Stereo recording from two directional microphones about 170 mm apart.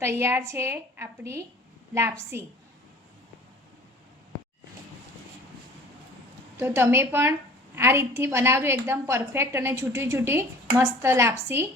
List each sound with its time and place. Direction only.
0.0 s a woman's voice: 15° right (ahead or behind)
6.6 s a woman's voice: 15° right (ahead or behind)